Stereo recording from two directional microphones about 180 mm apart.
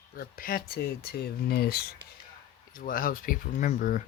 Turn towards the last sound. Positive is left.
turn(degrees=45)  # may be behind; listen again after turning